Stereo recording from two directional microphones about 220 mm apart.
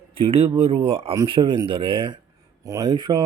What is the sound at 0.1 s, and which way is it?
Speech, 25° right (ahead or behind).